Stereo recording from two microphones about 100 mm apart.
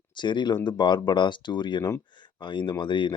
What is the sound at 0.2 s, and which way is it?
Speech, 50° left (ahead or behind).